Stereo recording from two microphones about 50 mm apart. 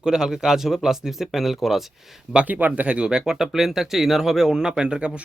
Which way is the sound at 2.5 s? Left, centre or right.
Right.